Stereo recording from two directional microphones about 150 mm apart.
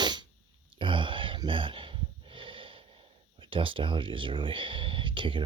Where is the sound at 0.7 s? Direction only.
35° right (ahead or behind).